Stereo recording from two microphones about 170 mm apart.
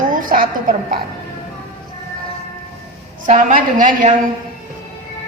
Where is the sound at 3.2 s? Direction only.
50° right (ahead or behind).